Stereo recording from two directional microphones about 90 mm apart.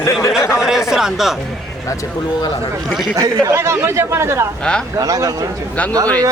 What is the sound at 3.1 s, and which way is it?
Speech, 40° right (ahead or behind).